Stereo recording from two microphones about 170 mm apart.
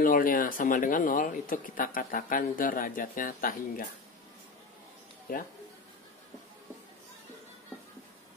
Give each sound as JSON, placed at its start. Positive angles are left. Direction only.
{"t": 0.0, "sound": "speech", "side_deg": 55}
{"t": 5.3, "sound": "speech", "side_deg": 60}